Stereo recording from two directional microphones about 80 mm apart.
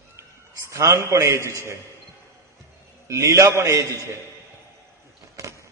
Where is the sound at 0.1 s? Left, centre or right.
Right.